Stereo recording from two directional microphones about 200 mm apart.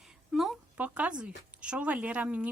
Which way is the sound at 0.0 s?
Centre (ahead or behind).